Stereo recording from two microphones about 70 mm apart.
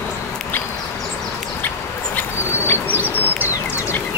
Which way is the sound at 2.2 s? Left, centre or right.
Left.